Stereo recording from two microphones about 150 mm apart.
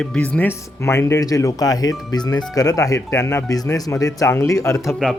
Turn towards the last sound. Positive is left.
turn(degrees=5)  # may be behind; listen again after turning